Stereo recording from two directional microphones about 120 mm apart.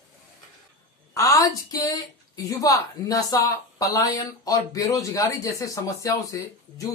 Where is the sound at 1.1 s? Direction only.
30° left (ahead or behind).